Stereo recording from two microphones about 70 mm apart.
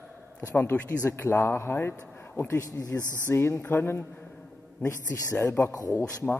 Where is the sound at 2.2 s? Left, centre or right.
Left.